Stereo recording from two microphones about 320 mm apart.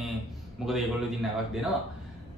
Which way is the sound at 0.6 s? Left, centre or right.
Centre.